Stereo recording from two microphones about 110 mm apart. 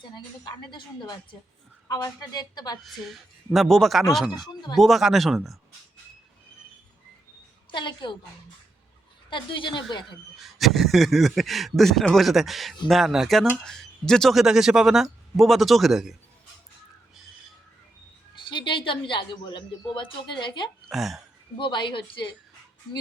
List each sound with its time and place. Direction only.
0.1 s a woman's voice: 40° left (ahead or behind)
2.8 s speech: centre (ahead or behind)
7.7 s speech: 45° left (ahead or behind)
9.3 s speech: 45° left (ahead or behind)
10.3 s speech: centre (ahead or behind)
18.4 s speech: 45° left (ahead or behind)
20.8 s speech: centre (ahead or behind)
21.6 s speech: 45° left (ahead or behind)